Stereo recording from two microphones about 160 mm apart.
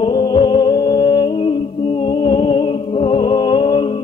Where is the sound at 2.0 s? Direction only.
30° left (ahead or behind).